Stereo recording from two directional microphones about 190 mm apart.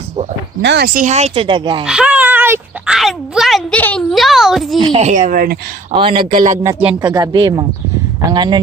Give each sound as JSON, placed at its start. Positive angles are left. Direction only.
{"t": 0.6, "sound": "speech", "side_deg": -65}
{"t": 0.9, "sound": "speech", "side_deg": -40}
{"t": 1.8, "sound": "a sound", "side_deg": -5}
{"t": 4.8, "sound": "speech", "side_deg": -30}
{"t": 5.9, "sound": "speech", "side_deg": -30}
{"t": 6.3, "sound": "speech", "side_deg": -40}
{"t": 6.8, "sound": "speech", "side_deg": -20}